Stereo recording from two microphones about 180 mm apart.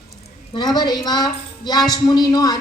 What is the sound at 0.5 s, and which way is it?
A woman's voice, 25° left (ahead or behind).